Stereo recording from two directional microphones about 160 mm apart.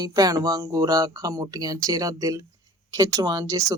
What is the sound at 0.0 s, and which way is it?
Speech, 25° right (ahead or behind).